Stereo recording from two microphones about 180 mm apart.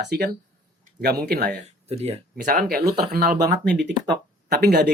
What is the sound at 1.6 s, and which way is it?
Speech, 35° right (ahead or behind).